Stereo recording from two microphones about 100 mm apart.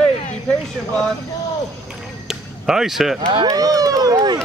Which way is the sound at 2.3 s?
5° right (ahead or behind).